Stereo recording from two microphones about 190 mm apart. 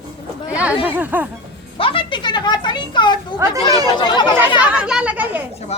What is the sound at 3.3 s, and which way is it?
Speech, 15° right (ahead or behind).